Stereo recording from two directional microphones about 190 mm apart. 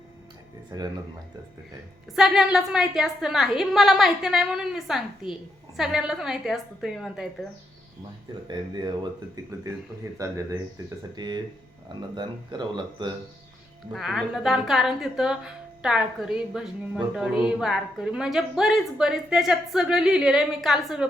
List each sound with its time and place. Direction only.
0.7 s speech: 20° right (ahead or behind)
2.1 s a woman's voice: centre (ahead or behind)
8.4 s speech: 25° right (ahead or behind)
10.0 s speech: 15° right (ahead or behind)
13.9 s a woman's voice: centre (ahead or behind)